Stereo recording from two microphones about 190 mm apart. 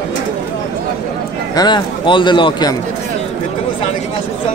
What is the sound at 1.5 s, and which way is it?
A man's voice, 25° left (ahead or behind).